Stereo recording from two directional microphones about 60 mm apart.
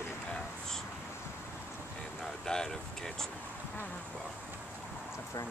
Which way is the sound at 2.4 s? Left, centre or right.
Centre.